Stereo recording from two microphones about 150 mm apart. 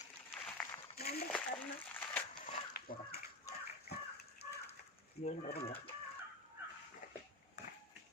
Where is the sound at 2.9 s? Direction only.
70° left (ahead or behind).